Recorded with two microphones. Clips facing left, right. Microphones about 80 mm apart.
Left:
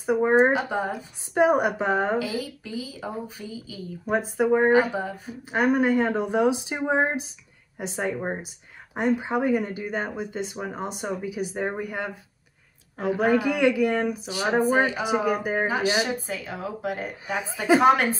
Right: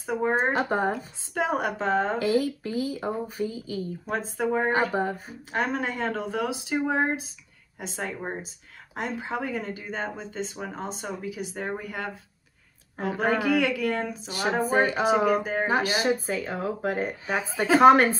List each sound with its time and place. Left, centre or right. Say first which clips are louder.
0.0 s speech: left 6 dB; centre
0.5 s speech: even; right
0.9 s speech: left 6 dB; centre
2.4 s speech: right 6 dB; right
4.4 s speech: left 5 dB; centre
4.9 s speech: right 3 dB; right
5.5 s speech: left 7 dB; centre
14.7 s speech: left 1 dB; right
15.2 s speech: even; centre
15.7 s speech: even; right